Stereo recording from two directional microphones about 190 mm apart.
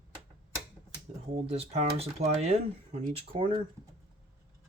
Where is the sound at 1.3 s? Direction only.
35° right (ahead or behind).